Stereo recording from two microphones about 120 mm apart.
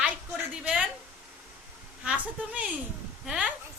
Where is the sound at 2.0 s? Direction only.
10° right (ahead or behind).